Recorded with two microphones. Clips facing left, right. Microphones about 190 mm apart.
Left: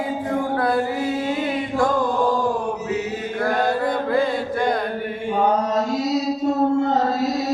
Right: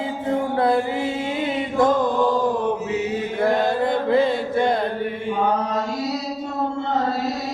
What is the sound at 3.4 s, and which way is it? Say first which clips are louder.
Mantra: right 1 dB; 20° right (ahead or behind).